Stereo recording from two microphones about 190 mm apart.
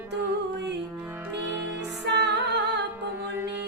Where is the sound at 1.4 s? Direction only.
10° right (ahead or behind).